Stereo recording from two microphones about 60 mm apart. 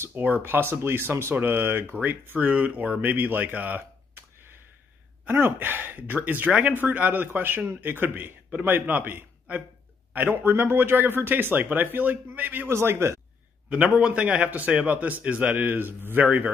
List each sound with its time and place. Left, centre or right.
0.4 s speech: right
5.2 s speech: right
12.6 s a man's voice: right
13.8 s a man's voice: centre; by 16.4 s right